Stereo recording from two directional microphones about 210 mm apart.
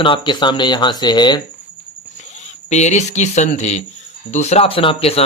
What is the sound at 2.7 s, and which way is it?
Speech, 35° left (ahead or behind).